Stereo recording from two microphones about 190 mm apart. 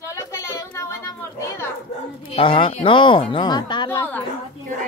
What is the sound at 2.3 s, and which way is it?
Speech, 25° left (ahead or behind).